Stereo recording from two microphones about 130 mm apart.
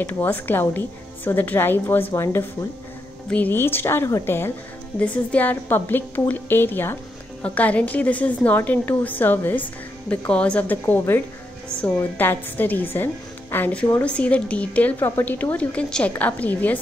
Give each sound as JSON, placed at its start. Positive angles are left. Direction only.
{"t": 0.0, "sound": "a woman's voice", "side_deg": 15}